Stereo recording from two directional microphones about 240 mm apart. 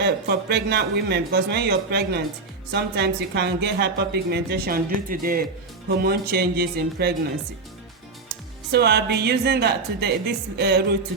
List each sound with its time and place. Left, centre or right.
0.0 s a woman's voice: right
8.7 s a woman's voice: right